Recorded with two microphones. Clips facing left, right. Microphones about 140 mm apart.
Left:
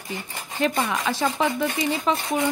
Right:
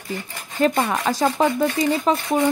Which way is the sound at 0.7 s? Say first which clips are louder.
Right 4 dB; 35° right (ahead or behind).